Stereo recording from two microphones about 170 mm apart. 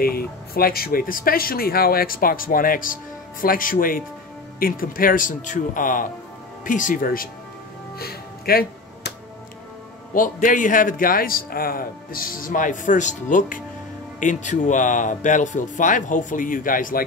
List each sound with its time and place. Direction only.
0.0 s a man's voice: 60° left (ahead or behind)
8.0 s music: 65° left (ahead or behind)
10.1 s a man's voice: 50° left (ahead or behind)